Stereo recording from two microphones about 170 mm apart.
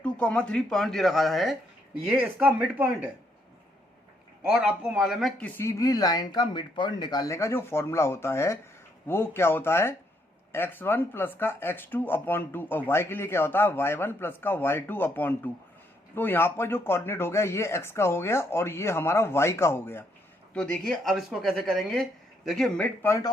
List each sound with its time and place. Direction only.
0.0 s speech: 5° left (ahead or behind); by 3.1 s 10° right (ahead or behind)
4.4 s speech: 5° right (ahead or behind)
23.0 s speech: 20° left (ahead or behind)